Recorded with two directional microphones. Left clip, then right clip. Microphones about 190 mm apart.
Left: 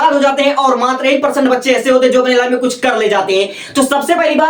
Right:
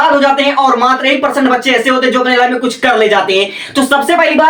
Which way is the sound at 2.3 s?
15° left (ahead or behind).